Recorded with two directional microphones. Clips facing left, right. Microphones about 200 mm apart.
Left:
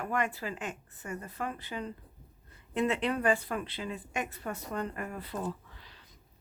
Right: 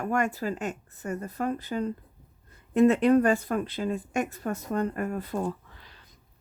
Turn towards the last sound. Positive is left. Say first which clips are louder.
# right 4 dB
turn(degrees=-50)  # may be behind; listen again after turning